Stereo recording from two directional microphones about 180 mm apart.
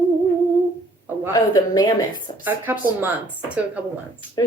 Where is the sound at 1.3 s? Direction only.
20° left (ahead or behind).